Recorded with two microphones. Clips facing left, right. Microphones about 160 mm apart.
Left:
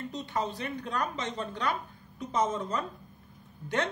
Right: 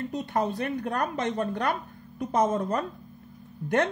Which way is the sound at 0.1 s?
55° right (ahead or behind).